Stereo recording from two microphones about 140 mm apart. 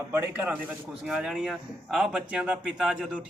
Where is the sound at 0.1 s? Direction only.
15° right (ahead or behind).